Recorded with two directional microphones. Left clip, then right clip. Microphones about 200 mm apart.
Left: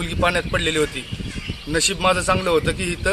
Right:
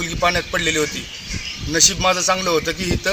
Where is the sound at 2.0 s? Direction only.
5° left (ahead or behind).